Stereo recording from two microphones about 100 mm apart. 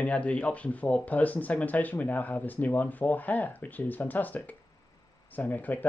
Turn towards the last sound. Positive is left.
turn(degrees=15)  # may be behind; listen again after turning